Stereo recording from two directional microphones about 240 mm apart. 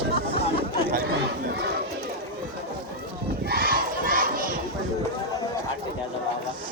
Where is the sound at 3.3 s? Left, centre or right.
Right.